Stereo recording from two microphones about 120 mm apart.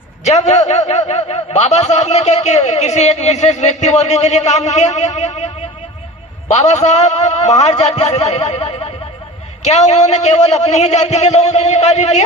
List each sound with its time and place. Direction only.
0.3 s a man's voice: 70° left (ahead or behind)
6.5 s a man's voice: 70° left (ahead or behind)
8.4 s snicker: 60° left (ahead or behind)
9.6 s a man's voice: 70° left (ahead or behind)